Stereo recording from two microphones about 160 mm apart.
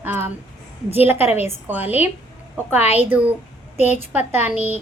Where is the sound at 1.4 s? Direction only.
15° right (ahead or behind).